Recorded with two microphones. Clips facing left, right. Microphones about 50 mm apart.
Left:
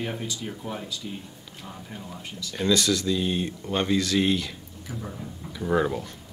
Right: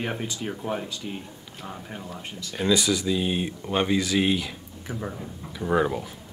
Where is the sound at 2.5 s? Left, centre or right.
Centre.